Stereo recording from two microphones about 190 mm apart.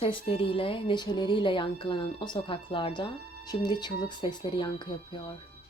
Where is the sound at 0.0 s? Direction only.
30° left (ahead or behind).